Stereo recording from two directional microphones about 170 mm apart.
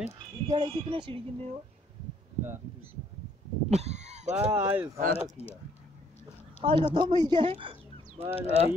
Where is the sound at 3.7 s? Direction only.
40° right (ahead or behind).